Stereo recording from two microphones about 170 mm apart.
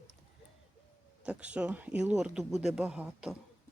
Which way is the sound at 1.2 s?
5° right (ahead or behind).